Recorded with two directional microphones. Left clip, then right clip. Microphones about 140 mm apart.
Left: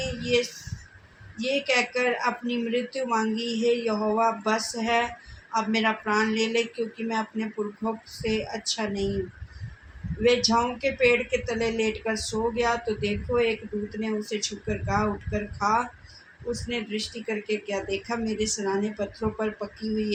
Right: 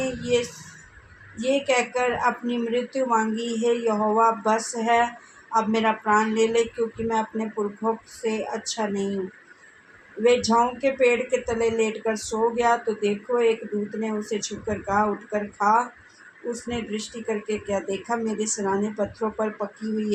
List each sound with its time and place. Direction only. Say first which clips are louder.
0.3 s speech: left 1 dB; 45° right (ahead or behind)
10.2 s speech: right 3 dB; 45° right (ahead or behind)